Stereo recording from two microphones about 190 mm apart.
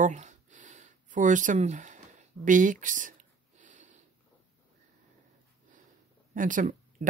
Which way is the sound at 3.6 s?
40° right (ahead or behind).